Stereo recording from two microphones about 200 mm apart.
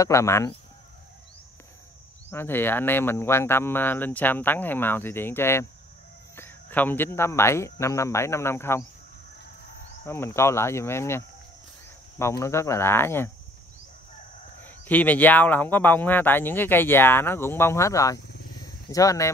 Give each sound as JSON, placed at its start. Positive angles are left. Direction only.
{"t": 0.0, "sound": "speech", "side_deg": 15}
{"t": 2.3, "sound": "speech", "side_deg": 10}
{"t": 10.0, "sound": "speech", "side_deg": 10}
{"t": 14.6, "sound": "speech", "side_deg": 10}
{"t": 18.6, "sound": "a sound", "side_deg": 15}